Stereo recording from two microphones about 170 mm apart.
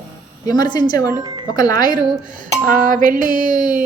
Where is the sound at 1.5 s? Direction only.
20° left (ahead or behind).